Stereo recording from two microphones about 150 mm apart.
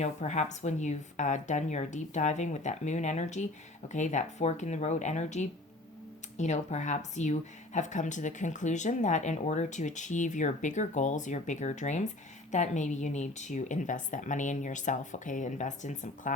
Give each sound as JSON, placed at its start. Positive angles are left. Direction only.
{"t": 0.0, "sound": "speech", "side_deg": 50}